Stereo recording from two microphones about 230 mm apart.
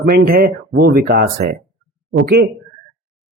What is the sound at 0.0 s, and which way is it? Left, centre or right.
Speech, right.